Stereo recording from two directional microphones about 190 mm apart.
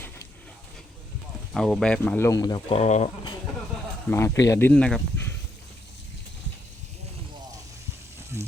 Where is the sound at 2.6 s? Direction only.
35° left (ahead or behind).